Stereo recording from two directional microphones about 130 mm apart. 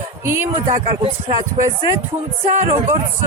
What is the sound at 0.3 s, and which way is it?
Speech, 15° right (ahead or behind).